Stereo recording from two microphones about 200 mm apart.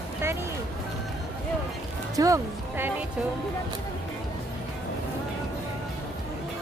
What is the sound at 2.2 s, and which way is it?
Speech, 15° right (ahead or behind).